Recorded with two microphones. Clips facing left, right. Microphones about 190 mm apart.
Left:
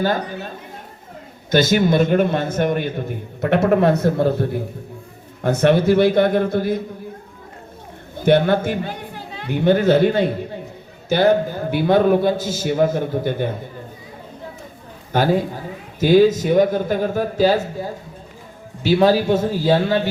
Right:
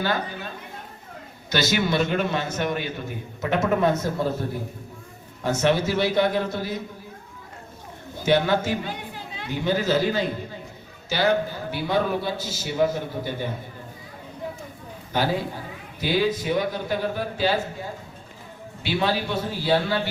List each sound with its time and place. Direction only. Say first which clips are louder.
1.5 s a man's voice: left 7 dB; 50° left (ahead or behind)
8.2 s a man's voice: left 6 dB; 55° left (ahead or behind)
15.1 s a man's voice: left 7 dB; 50° left (ahead or behind)
18.8 s a man's voice: left 10 dB; 40° left (ahead or behind)